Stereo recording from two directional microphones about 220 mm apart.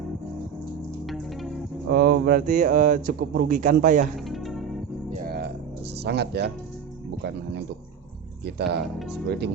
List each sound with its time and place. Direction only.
1.0 s music: centre (ahead or behind)
1.9 s speech: 50° right (ahead or behind)
4.3 s music: centre (ahead or behind)
5.2 s music: 45° right (ahead or behind)
6.0 s speech: 50° right (ahead or behind)
8.4 s speech: 50° right (ahead or behind)
9.0 s speech: centre (ahead or behind)